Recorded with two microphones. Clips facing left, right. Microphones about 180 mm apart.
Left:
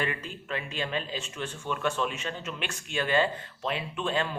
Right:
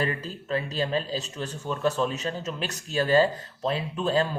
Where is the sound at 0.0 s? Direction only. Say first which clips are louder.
Right 3 dB; 35° right (ahead or behind).